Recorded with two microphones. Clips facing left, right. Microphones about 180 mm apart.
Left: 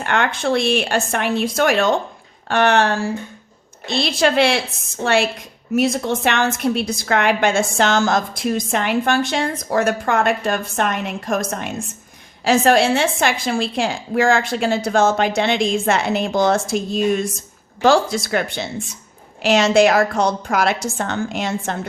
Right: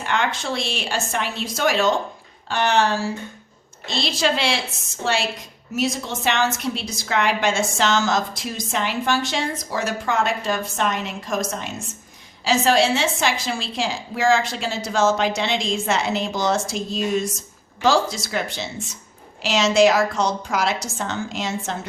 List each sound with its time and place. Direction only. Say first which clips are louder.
0.0 s a woman's voice: left 4 dB; 55° left (ahead or behind)